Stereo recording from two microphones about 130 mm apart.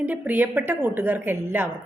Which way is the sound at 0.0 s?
15° right (ahead or behind).